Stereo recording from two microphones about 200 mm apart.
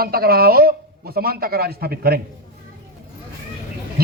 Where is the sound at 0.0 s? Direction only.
50° right (ahead or behind).